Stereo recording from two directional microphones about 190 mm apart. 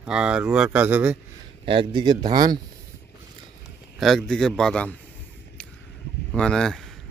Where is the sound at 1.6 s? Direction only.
25° right (ahead or behind).